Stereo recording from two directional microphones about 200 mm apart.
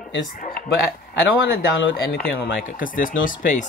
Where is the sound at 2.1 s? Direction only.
45° left (ahead or behind).